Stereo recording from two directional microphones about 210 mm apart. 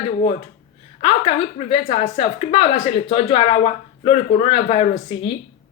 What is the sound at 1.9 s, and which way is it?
Speech, 25° left (ahead or behind).